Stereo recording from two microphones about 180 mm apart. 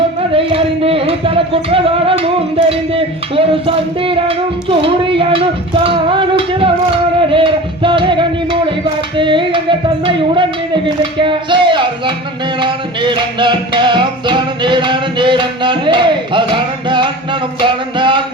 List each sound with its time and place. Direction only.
0.3 s music: 30° right (ahead or behind)